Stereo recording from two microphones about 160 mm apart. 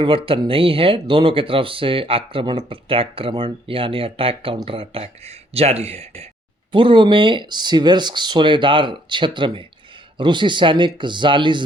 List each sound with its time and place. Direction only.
0.0 s speech: 35° right (ahead or behind)